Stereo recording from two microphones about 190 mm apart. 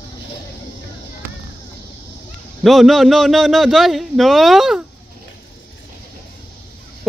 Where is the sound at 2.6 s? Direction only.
Centre (ahead or behind).